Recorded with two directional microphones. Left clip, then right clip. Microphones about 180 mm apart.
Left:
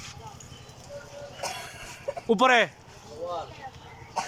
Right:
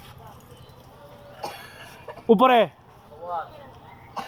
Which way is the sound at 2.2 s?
15° right (ahead or behind).